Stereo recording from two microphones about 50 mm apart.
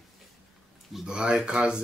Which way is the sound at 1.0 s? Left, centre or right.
Centre.